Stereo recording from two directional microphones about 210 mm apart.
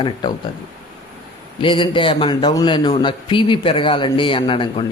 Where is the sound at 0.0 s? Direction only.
20° left (ahead or behind).